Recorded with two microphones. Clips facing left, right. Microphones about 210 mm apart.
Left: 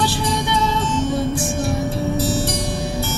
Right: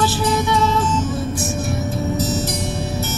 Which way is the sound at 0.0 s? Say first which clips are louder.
Right 2 dB; 30° left (ahead or behind).